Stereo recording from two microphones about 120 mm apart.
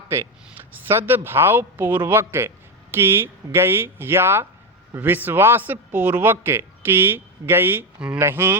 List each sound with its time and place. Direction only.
0.1 s a man's voice: 20° right (ahead or behind)
8.2 s speech: 20° right (ahead or behind)